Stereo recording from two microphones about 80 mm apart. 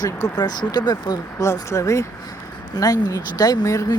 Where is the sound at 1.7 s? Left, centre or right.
Left.